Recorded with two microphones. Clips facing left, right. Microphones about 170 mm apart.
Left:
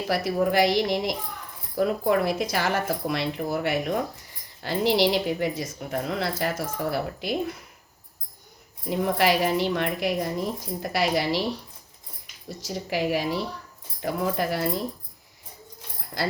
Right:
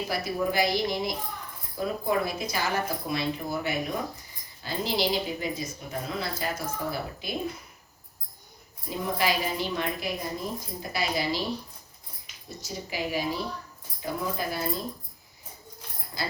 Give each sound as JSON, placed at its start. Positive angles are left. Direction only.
{"t": 0.1, "sound": "a woman's voice", "side_deg": 80}
{"t": 8.9, "sound": "speech", "side_deg": 70}
{"t": 12.5, "sound": "speech", "side_deg": 90}